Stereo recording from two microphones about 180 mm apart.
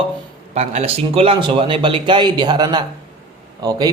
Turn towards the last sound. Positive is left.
turn(degrees=-20)  # may be behind; listen again after turning